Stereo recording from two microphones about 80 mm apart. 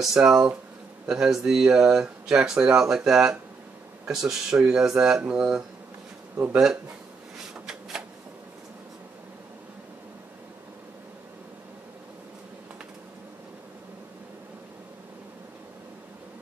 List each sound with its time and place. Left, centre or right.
0.0 s speech: centre
6.3 s speech: centre
7.5 s shuffling cards: centre